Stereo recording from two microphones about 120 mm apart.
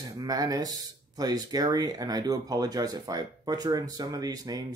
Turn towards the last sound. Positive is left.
turn(degrees=-30)  # may be behind; listen again after turning